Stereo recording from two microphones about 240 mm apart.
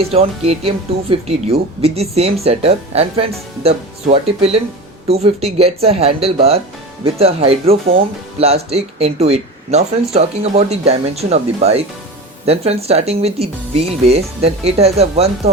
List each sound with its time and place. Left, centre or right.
0.0 s speech: right